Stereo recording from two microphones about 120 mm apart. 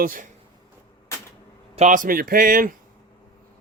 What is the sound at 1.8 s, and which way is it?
Speech, 90° right.